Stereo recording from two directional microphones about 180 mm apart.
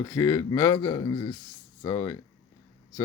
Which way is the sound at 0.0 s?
15° left (ahead or behind).